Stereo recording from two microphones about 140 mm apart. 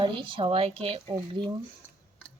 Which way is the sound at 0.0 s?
35° right (ahead or behind).